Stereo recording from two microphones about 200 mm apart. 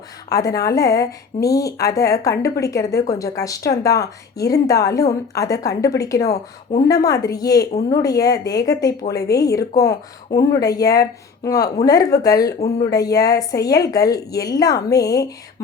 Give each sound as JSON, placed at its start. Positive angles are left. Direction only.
{"t": 0.3, "sound": "a woman's voice", "side_deg": 15}